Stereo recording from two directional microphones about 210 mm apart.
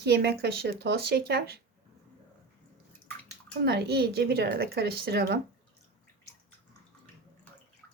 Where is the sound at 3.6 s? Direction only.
50° right (ahead or behind).